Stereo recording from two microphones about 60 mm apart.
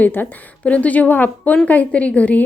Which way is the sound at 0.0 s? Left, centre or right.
Left.